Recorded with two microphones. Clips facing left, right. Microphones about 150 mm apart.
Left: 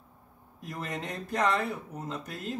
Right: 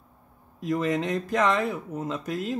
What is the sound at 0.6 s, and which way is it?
A man's voice, 90° right.